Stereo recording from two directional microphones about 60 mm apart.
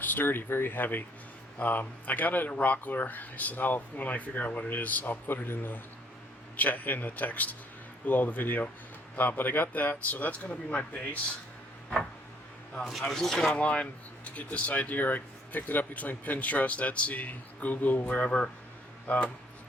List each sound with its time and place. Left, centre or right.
0.0 s speech: left
12.9 s a man's voice: centre
13.5 s speech: centre